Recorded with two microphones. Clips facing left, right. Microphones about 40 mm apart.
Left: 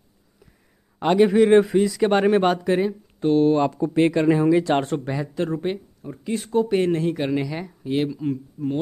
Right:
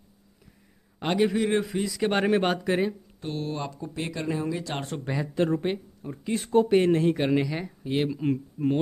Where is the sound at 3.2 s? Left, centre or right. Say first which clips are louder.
Left 15 dB; left.